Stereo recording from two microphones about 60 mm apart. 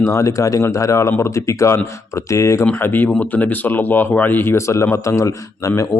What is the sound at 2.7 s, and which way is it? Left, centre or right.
Speech, left.